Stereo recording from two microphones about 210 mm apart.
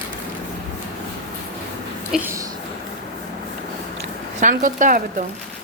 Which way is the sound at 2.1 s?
10° right (ahead or behind).